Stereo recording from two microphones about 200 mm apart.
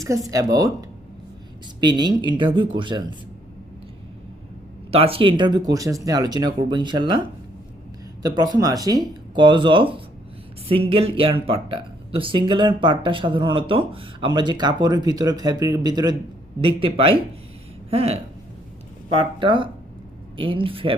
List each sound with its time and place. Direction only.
0.3 s speech: 15° right (ahead or behind)
4.9 s speech: 30° right (ahead or behind)
19.4 s speech: 25° right (ahead or behind)